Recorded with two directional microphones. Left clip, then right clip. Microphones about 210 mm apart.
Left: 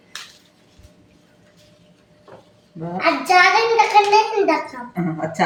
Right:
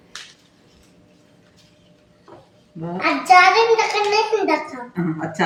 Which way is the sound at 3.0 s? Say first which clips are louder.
Right 2 dB; 20° right (ahead or behind).